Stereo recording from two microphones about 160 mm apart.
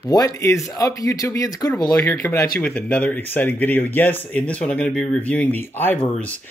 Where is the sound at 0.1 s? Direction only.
20° left (ahead or behind).